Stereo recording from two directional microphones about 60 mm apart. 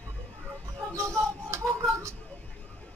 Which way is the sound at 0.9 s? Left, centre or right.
Right.